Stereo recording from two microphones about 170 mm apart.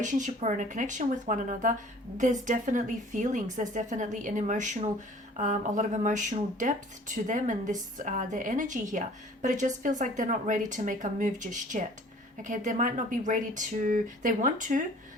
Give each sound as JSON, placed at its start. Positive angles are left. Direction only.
{"t": 0.0, "sound": "speech", "side_deg": -45}